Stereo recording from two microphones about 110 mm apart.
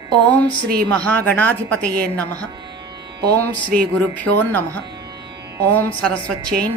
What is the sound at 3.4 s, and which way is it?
Speech, 15° left (ahead or behind).